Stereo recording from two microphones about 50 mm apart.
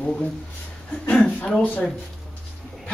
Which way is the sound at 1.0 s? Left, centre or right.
Left.